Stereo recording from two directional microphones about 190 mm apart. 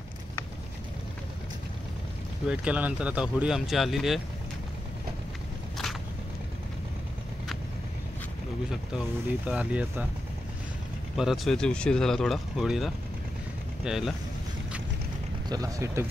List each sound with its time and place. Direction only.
2.4 s speech: 5° right (ahead or behind)
9.5 s speech: 5° right (ahead or behind)
11.1 s speech: centre (ahead or behind)
15.4 s speech: 20° right (ahead or behind)